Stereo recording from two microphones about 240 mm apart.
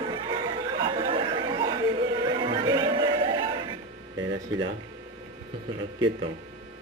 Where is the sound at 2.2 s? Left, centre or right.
Centre.